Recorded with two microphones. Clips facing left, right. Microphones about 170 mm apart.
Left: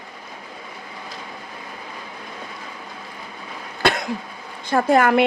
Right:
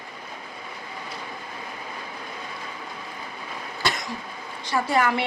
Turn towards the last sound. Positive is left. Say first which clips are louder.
# left 7 dB
turn(degrees=50)  # may be behind; listen again after turning